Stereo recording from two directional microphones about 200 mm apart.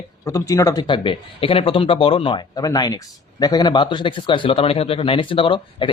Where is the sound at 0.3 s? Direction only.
15° left (ahead or behind).